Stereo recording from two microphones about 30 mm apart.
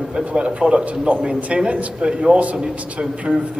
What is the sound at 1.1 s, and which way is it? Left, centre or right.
Speech, right.